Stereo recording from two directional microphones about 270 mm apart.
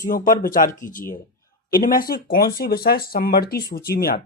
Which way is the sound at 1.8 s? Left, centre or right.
Left.